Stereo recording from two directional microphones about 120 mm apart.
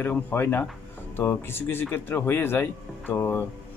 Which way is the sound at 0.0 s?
15° left (ahead or behind).